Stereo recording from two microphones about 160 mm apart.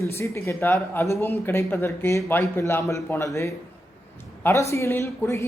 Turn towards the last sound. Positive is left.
turn(degrees=15)  # may be behind; listen again after turning